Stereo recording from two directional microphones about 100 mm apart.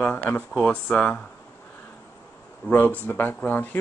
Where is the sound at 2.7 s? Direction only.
20° left (ahead or behind).